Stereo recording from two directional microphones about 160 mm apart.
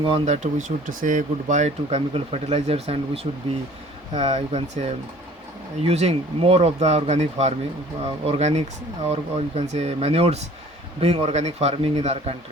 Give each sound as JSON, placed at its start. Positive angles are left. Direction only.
{"t": 0.0, "sound": "speech", "side_deg": -40}
{"t": 4.1, "sound": "speech", "side_deg": -40}